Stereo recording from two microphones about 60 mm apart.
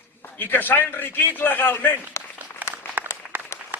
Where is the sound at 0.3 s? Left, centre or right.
Left.